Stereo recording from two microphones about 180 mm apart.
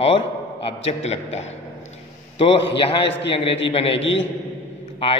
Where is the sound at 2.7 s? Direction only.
30° left (ahead or behind).